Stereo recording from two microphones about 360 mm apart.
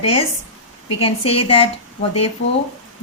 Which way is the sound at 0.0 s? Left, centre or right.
Centre.